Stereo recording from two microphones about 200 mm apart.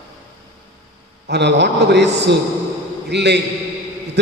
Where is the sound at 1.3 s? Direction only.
60° right (ahead or behind).